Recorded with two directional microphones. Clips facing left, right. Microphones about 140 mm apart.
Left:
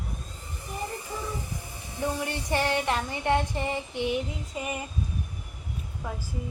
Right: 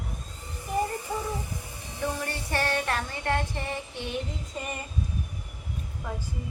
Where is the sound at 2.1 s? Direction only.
15° left (ahead or behind).